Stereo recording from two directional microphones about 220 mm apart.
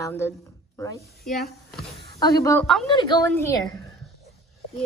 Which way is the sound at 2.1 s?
15° left (ahead or behind).